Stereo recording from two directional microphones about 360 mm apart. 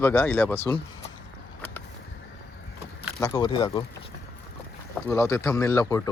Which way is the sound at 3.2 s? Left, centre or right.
Centre.